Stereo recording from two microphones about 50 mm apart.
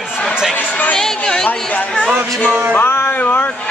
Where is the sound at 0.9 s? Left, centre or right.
Centre.